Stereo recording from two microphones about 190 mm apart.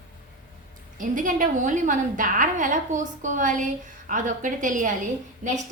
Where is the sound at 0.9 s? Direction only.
45° right (ahead or behind).